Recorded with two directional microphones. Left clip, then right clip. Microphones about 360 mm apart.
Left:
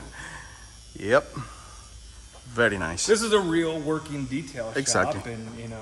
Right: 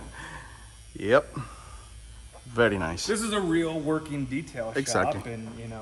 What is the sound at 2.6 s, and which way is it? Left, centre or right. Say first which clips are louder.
Speech: left 1 dB; centre.